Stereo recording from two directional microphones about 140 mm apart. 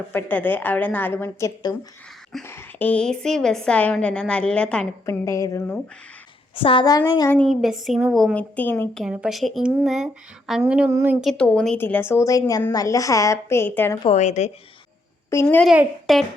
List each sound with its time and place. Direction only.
0.1 s a woman's voice: 15° left (ahead or behind)
5.0 s a woman's voice: 20° left (ahead or behind)
6.6 s a woman's voice: 35° left (ahead or behind)
7.3 s a woman's voice: 10° left (ahead or behind)
7.5 s speech: centre (ahead or behind); by 8.9 s 15° left (ahead or behind)
9.0 s speech: 5° right (ahead or behind)
10.6 s a sound: 10° right (ahead or behind)
11.2 s a woman's voice: centre (ahead or behind)
14.1 s speech: 55° left (ahead or behind)
15.3 s a woman's voice: 15° left (ahead or behind)
15.6 s speech: 5° right (ahead or behind)